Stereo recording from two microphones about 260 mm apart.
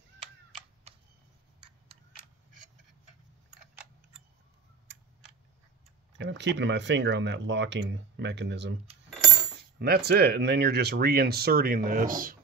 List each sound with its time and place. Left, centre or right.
6.1 s speech: right
9.8 s speech: right